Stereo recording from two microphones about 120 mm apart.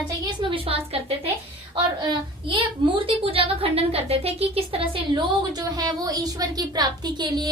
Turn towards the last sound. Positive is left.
turn(degrees=-35)  # may be behind; listen again after turning